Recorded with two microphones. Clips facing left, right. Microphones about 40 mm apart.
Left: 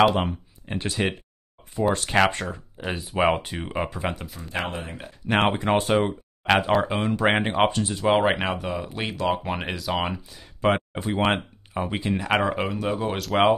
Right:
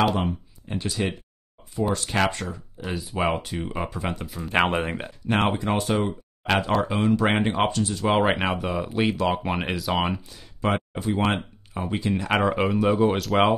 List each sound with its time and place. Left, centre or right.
0.7 s speech: left
2.0 s speech: centre
2.8 s speech: left
4.1 s speech: centre
4.5 s speech: right
5.6 s speech: left
6.0 s speech: centre
7.7 s speech: left
8.0 s speech: centre
10.6 s speech: centre
11.2 s a sound: centre
11.9 s speech: centre
12.3 s speech: centre